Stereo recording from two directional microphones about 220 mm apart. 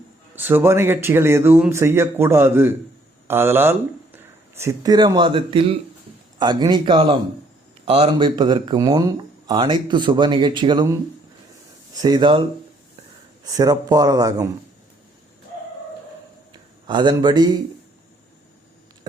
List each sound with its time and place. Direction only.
0.3 s speech: 10° right (ahead or behind)
11.9 s speech: 20° right (ahead or behind)
16.5 s a man's voice: 20° right (ahead or behind)